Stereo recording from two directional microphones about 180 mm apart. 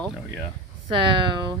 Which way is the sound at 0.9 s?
25° right (ahead or behind).